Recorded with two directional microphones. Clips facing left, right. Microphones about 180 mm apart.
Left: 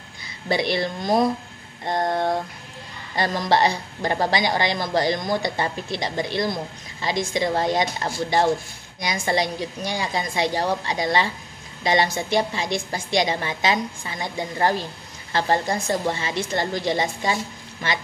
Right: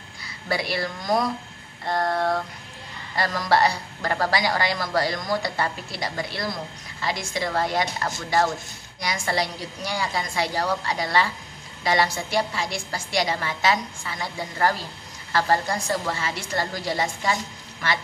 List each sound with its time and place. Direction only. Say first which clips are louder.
0.5 s a woman's voice: left 4 dB; 20° left (ahead or behind)